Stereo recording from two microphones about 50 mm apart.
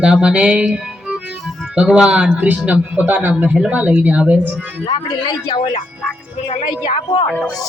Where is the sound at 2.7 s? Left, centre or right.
Right.